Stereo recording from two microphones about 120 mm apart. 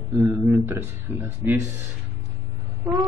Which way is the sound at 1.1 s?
15° right (ahead or behind).